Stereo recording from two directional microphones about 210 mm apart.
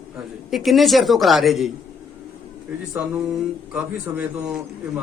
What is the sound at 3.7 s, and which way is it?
Speech, 5° right (ahead or behind).